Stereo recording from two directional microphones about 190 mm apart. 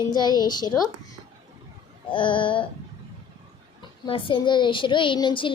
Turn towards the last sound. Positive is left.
turn(degrees=25)  # may be behind; listen again after turning